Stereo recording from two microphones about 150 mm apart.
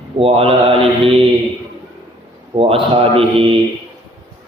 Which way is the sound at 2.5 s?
35° right (ahead or behind).